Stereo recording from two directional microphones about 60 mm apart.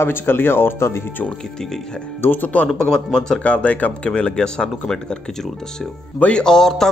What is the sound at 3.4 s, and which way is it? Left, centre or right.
A man's voice, left.